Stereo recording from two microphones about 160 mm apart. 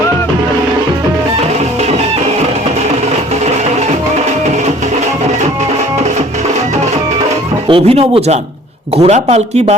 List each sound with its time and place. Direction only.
7.7 s speech: 35° right (ahead or behind)